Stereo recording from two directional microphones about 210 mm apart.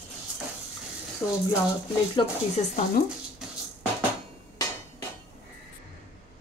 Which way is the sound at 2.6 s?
30° left (ahead or behind).